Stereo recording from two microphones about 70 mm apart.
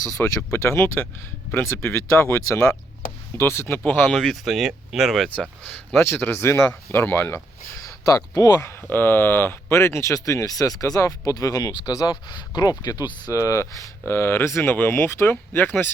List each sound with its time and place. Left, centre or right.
0.0 s speech: left
0.5 s speech: left
3.8 s speech: left
4.1 s speech: centre
6.0 s speech: left
6.7 s speech: left
8.4 s speech: left
8.9 s speech: left
11.9 s speech: left
13.3 s speech: left